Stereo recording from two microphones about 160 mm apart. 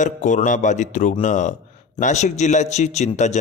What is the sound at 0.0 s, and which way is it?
A man's voice, 50° left (ahead or behind).